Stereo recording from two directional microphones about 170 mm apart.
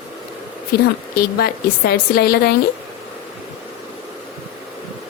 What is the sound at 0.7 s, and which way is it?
A woman's voice, 70° left (ahead or behind).